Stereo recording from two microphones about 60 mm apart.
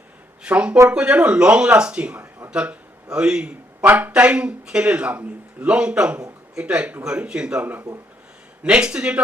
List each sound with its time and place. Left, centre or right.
0.4 s a man's voice: centre